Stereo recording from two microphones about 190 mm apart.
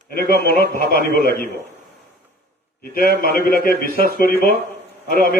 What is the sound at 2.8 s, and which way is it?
A man's voice, 50° left (ahead or behind).